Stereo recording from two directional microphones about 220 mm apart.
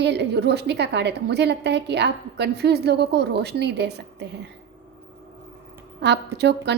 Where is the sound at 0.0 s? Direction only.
50° right (ahead or behind).